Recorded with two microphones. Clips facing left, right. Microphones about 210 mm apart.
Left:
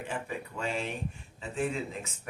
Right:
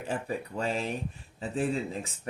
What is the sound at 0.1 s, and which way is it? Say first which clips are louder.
Speech: right 7 dB; 35° right (ahead or behind).